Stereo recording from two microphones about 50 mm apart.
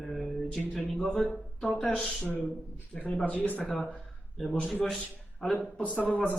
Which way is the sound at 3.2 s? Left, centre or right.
Left.